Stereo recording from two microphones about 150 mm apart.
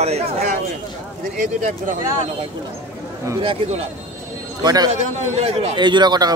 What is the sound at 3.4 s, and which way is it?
Speech, 35° right (ahead or behind).